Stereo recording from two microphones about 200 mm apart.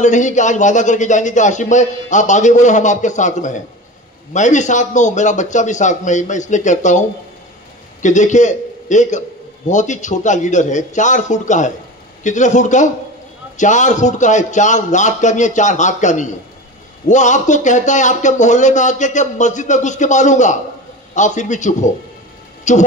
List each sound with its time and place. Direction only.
0.0 s a man's voice: 40° left (ahead or behind)